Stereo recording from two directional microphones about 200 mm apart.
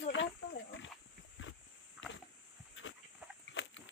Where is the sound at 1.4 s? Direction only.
75° left (ahead or behind).